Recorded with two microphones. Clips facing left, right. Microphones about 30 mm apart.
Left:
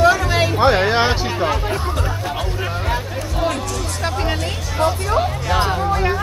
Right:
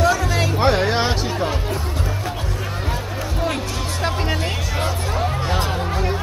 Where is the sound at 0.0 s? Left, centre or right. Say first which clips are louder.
Left 4 dB; centre.